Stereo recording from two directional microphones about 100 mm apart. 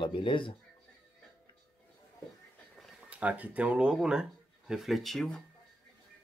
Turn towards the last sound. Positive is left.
turn(degrees=5)  # may be behind; listen again after turning